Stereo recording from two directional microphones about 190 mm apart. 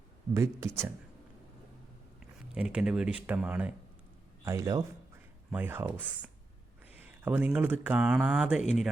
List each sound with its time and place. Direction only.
0.3 s speech: 15° right (ahead or behind)
2.6 s speech: 5° right (ahead or behind)